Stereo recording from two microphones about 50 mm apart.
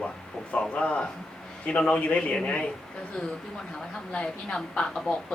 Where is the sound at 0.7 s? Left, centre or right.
Left.